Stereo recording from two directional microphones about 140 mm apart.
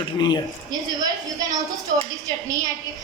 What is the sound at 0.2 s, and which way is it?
Speech, 30° left (ahead or behind).